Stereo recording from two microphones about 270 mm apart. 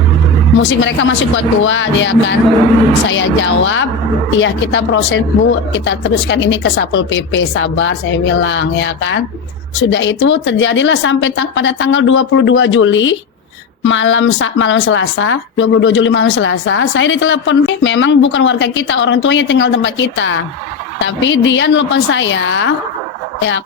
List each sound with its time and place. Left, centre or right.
0.6 s a woman's voice: left